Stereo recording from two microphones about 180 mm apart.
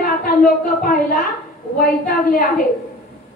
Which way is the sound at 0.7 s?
50° left (ahead or behind).